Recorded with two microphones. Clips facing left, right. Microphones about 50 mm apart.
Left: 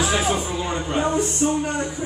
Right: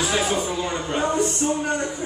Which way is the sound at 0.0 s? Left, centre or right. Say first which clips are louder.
Left 1 dB; centre.